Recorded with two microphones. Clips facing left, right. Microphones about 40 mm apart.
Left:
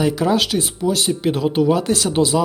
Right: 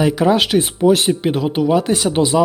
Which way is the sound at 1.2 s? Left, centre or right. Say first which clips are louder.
Even; centre.